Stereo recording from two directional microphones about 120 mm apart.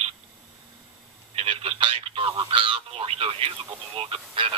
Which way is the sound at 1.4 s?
55° right (ahead or behind).